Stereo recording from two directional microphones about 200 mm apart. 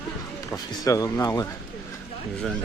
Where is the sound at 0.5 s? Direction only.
15° left (ahead or behind).